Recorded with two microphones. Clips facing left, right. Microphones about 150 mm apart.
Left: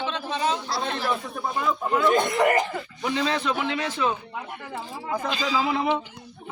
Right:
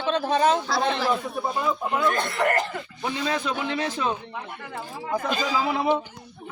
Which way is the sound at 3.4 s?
40° right (ahead or behind).